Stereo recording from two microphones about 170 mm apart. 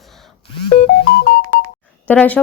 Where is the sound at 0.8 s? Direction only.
80° left.